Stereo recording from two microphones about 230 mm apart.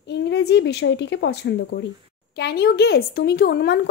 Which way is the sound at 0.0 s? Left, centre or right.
Left.